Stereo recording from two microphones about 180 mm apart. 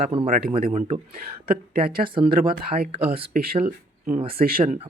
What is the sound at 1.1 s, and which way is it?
Speech, 55° right (ahead or behind).